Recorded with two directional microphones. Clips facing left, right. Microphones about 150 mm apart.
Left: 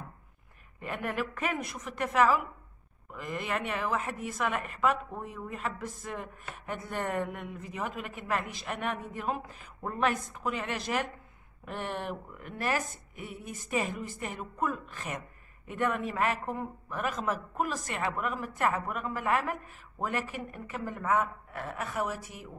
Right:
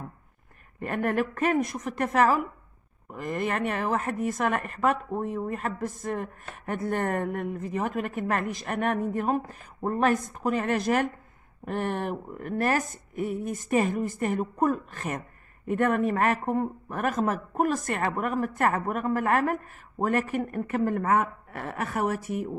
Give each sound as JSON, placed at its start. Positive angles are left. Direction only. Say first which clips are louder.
{"t": 0.7, "sound": "speech", "louder": "right 7 dB", "side_deg": -50}